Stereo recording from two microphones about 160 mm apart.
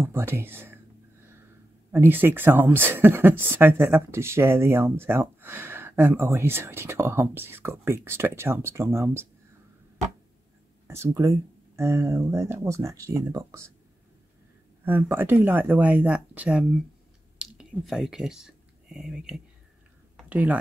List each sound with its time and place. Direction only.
0.0 s speech: 15° right (ahead or behind)
1.9 s speech: 10° right (ahead or behind)
10.9 s speech: 15° right (ahead or behind)
14.9 s speech: 15° right (ahead or behind)